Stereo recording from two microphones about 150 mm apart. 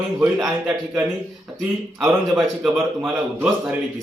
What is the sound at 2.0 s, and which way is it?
A man's voice, 15° right (ahead or behind).